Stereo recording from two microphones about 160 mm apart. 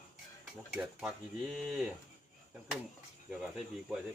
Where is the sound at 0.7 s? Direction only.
5° right (ahead or behind).